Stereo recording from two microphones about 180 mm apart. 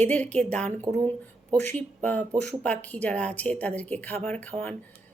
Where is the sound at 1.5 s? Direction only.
10° left (ahead or behind).